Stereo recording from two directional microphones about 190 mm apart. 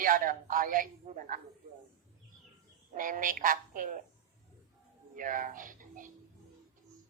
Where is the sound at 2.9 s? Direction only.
45° right (ahead or behind).